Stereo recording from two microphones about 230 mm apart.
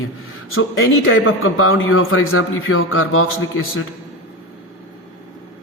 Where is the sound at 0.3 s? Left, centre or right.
Left.